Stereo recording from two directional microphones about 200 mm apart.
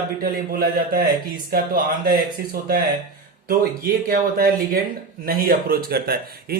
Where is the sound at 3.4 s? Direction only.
45° right (ahead or behind).